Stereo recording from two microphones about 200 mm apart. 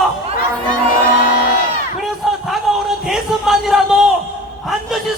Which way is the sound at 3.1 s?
Centre (ahead or behind).